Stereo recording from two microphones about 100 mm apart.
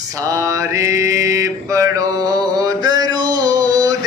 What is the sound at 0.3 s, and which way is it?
Mantra, 35° right (ahead or behind).